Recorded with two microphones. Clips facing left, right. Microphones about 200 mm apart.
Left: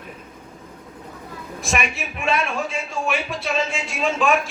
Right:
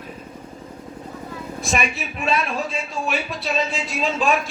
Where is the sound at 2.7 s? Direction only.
35° right (ahead or behind).